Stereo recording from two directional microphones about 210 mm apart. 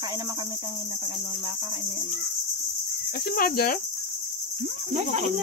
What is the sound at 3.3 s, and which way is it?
Cricket, 45° left (ahead or behind).